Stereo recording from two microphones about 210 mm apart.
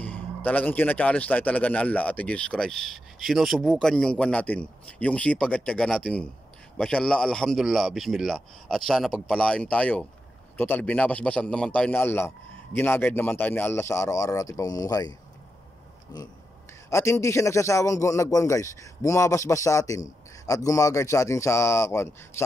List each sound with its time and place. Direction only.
0.0 s a man's voice: 5° left (ahead or behind)